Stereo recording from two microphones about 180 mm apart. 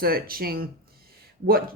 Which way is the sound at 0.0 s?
55° right (ahead or behind).